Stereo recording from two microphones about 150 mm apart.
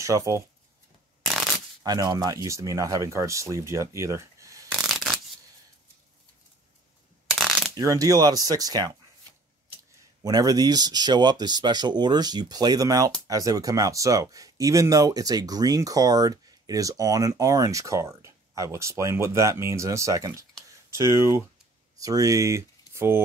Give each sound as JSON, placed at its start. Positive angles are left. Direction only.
{"t": 0.0, "sound": "speech", "side_deg": -20}
{"t": 1.2, "sound": "shuffling cards", "side_deg": 0}
{"t": 1.8, "sound": "speech", "side_deg": -25}
{"t": 4.6, "sound": "shuffling cards", "side_deg": 0}
{"t": 7.2, "sound": "ratchet", "side_deg": 0}
{"t": 7.7, "sound": "speech", "side_deg": -25}
{"t": 9.9, "sound": "speech", "side_deg": -25}
{"t": 20.6, "sound": "a sound", "side_deg": -20}
{"t": 22.0, "sound": "speech", "side_deg": -25}